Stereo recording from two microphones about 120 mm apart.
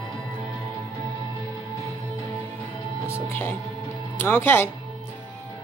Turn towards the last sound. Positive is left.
turn(degrees=20)  # may be behind; listen again after turning